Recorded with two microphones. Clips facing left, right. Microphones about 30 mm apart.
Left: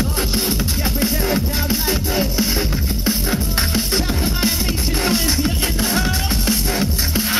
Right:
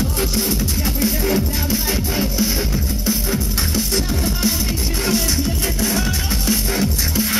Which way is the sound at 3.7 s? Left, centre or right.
Left.